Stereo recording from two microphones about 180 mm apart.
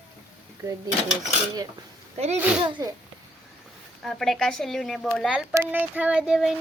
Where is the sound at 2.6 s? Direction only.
25° right (ahead or behind).